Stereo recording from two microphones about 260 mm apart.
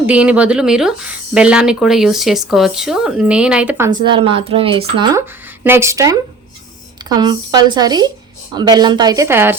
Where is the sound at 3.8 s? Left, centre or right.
Centre.